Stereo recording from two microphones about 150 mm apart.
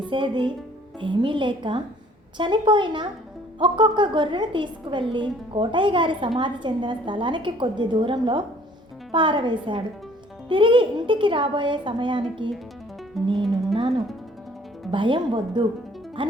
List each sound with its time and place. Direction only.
0.0 s a woman's voice: 35° right (ahead or behind)
14.8 s a woman's voice: 35° right (ahead or behind)